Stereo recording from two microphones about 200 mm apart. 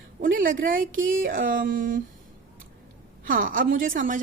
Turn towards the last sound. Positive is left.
turn(degrees=-40)  # may be behind; listen again after turning